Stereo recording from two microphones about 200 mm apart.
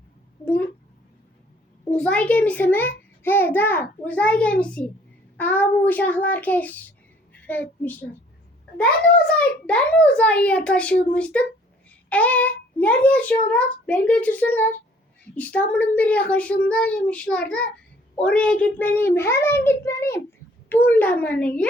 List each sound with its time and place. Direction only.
0.4 s a sound: 10° left (ahead or behind)
1.9 s a child's voice: 5° left (ahead or behind)
9.6 s a child's voice: 5° left (ahead or behind)